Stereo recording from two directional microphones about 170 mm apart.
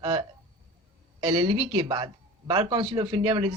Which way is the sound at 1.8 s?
25° right (ahead or behind).